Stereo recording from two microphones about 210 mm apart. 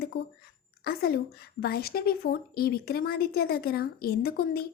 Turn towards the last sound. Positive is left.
turn(degrees=45)  # may be behind; listen again after turning